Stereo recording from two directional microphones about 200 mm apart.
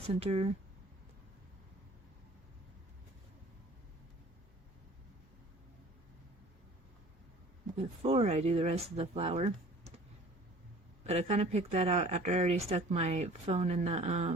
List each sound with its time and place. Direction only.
0.1 s speech: 30° right (ahead or behind)
8.0 s speech: 30° right (ahead or behind)
11.0 s speech: 30° right (ahead or behind)